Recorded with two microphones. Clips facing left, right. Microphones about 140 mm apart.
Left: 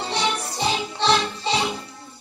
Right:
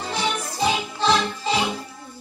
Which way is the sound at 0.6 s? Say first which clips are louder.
Right 3 dB; 30° left (ahead or behind).